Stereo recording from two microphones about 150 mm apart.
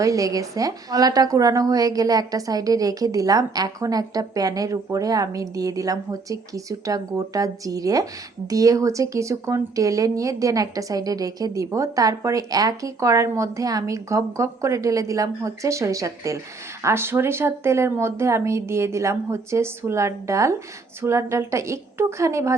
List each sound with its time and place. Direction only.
0.0 s a woman's voice: 20° right (ahead or behind)